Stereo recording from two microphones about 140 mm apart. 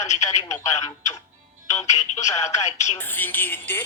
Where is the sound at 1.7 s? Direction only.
55° left (ahead or behind).